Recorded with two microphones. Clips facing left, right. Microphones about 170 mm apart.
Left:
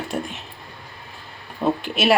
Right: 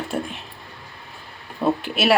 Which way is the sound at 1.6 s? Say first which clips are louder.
Even; centre (ahead or behind).